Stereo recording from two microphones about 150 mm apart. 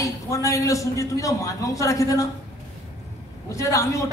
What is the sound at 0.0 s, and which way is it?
A woman's voice, 20° left (ahead or behind).